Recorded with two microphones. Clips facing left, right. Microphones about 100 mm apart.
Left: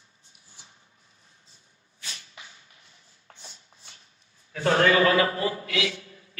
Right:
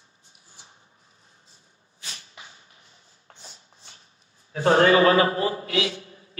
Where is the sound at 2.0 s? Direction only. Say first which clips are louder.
Right 1 dB; 35° right (ahead or behind).